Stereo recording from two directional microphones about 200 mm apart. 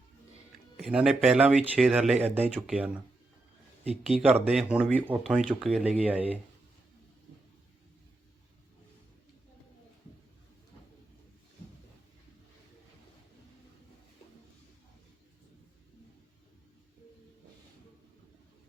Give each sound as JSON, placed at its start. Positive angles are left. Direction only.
{"t": 0.8, "sound": "speech", "side_deg": -5}
{"t": 2.2, "sound": "speech", "side_deg": -30}
{"t": 2.6, "sound": "speech", "side_deg": -5}
{"t": 4.0, "sound": "speech", "side_deg": -5}